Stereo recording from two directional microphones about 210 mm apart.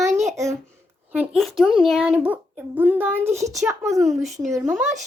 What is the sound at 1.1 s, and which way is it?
A woman's voice, 5° right (ahead or behind).